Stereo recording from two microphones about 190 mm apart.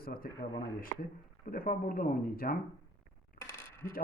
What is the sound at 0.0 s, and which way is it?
Speech, 50° left (ahead or behind).